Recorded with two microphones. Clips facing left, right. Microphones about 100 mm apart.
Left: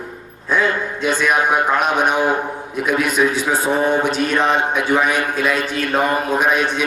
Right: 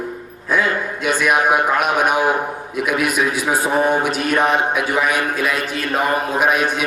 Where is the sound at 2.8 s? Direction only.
30° left (ahead or behind).